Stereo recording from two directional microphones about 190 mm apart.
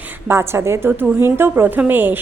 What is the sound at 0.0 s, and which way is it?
A woman's voice, 10° right (ahead or behind).